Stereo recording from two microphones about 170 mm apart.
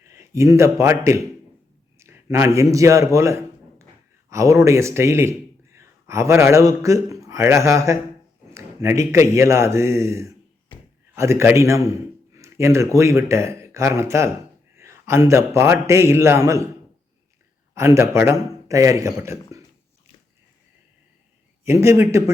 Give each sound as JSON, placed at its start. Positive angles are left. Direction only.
{"t": 0.0, "sound": "a man's voice", "side_deg": -15}
{"t": 17.7, "sound": "a man's voice", "side_deg": -15}
{"t": 21.6, "sound": "a man's voice", "side_deg": -15}